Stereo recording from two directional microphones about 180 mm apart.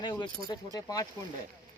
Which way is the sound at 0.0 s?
25° left (ahead or behind).